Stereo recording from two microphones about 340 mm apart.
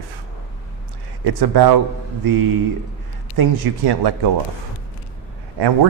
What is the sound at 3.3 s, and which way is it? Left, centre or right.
Speech, right.